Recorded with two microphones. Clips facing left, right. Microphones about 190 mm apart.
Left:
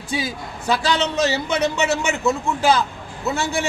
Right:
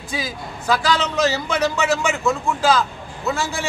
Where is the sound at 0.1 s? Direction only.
25° left (ahead or behind).